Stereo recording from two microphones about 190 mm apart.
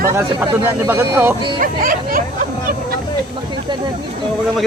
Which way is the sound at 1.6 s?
45° right (ahead or behind).